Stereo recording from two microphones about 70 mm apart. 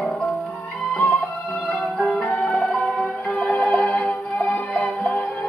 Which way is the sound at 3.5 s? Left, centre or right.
Centre.